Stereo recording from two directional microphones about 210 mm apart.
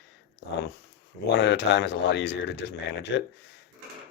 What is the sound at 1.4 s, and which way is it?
Speech, 55° left (ahead or behind).